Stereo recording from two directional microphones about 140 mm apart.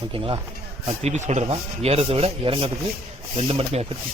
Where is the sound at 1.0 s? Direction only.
55° right (ahead or behind).